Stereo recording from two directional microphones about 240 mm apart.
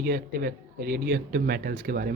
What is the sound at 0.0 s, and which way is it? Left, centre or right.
A woman's voice, right.